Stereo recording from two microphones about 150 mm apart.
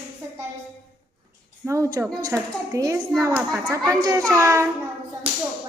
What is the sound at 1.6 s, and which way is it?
A woman's voice, 20° right (ahead or behind).